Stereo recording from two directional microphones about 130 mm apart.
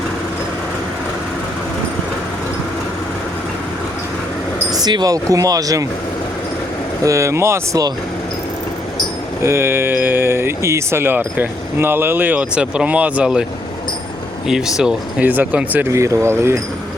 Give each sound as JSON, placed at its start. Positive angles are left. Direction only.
{"t": 4.8, "sound": "speech", "side_deg": -30}
{"t": 7.0, "sound": "speech", "side_deg": -25}
{"t": 9.4, "sound": "speech", "side_deg": -20}
{"t": 14.4, "sound": "speech", "side_deg": -5}